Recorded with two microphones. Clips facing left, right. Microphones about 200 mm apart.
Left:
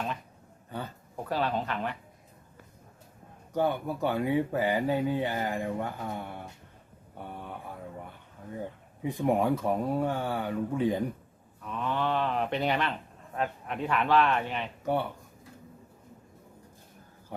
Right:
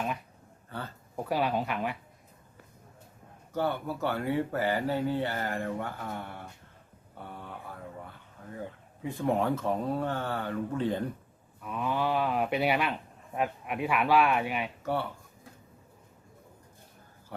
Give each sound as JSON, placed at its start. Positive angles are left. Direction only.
{"t": 0.7, "sound": "speech", "side_deg": 15}
{"t": 1.1, "sound": "speech", "side_deg": -10}
{"t": 3.5, "sound": "speech", "side_deg": 15}
{"t": 9.0, "sound": "speech", "side_deg": 15}
{"t": 11.6, "sound": "speech", "side_deg": -10}